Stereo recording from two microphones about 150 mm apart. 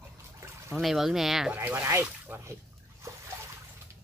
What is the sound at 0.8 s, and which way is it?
Speech, centre (ahead or behind).